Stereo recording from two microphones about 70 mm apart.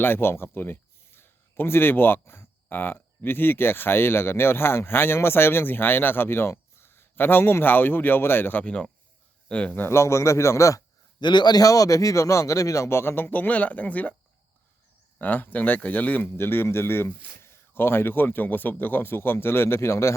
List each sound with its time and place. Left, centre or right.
0.0 s speech: left
8.6 s speech: centre
9.8 s a man's voice: left
11.2 s a man's voice: left
11.6 s speech: left
15.2 s speech: left